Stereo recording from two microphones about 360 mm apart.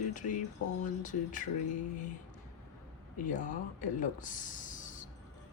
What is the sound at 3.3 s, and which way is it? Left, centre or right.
Speech, left.